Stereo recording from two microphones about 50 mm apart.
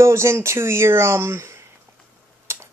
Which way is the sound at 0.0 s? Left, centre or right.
Right.